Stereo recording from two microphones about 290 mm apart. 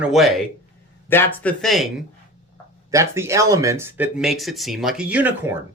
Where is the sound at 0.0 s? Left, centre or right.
Centre.